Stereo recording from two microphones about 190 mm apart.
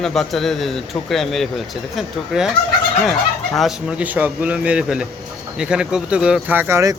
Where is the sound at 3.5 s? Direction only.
Centre (ahead or behind).